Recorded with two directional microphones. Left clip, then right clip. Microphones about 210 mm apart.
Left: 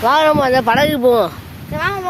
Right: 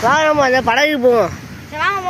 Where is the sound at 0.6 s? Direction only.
10° left (ahead or behind).